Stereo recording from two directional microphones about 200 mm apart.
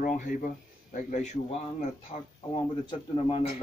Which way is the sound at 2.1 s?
25° left (ahead or behind).